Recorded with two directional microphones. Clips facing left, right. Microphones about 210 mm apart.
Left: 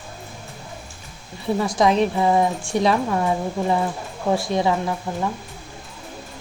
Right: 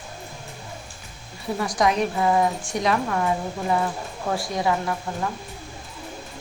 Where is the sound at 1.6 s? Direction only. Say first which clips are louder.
Left 3 dB; 25° left (ahead or behind).